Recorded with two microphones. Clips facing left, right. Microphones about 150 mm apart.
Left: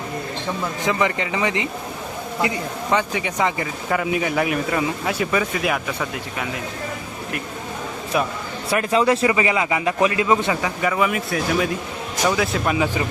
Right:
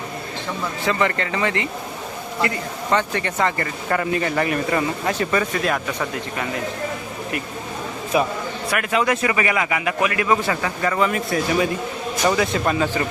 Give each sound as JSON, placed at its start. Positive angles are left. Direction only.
{"t": 0.9, "sound": "speech", "side_deg": 15}
{"t": 8.1, "sound": "speech", "side_deg": 0}
{"t": 8.7, "sound": "a man's voice", "side_deg": 30}